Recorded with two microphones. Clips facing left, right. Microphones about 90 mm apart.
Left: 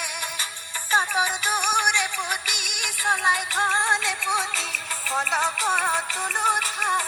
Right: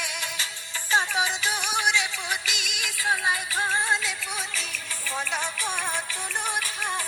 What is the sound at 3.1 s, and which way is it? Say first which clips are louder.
Music: left 4 dB; 65° left (ahead or behind).